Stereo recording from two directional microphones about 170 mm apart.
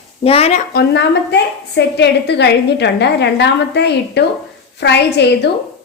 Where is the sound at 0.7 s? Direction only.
75° left (ahead or behind).